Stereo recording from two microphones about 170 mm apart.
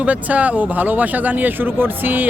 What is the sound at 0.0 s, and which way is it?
Speech, 10° right (ahead or behind).